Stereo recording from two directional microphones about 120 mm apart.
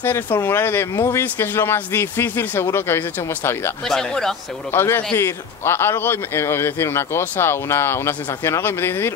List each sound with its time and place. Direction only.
0.0 s a man's voice: 20° left (ahead or behind)
3.8 s speech: 5° left (ahead or behind)
4.7 s a man's voice: 20° left (ahead or behind)